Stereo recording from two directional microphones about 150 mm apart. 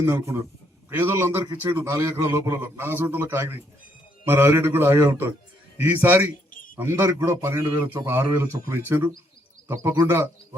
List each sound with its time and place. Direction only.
0.0 s a man's voice: 20° right (ahead or behind)
6.5 s a sound: 65° left (ahead or behind)
6.7 s a man's voice: 15° right (ahead or behind)